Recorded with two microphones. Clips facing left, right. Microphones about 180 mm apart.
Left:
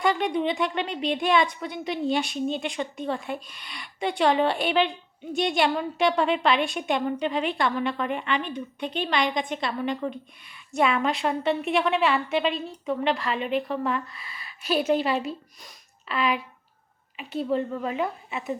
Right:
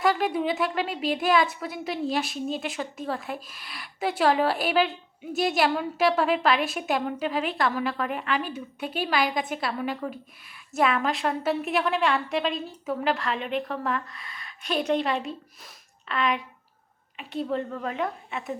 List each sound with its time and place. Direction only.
0.0 s a woman's voice: 5° right (ahead or behind)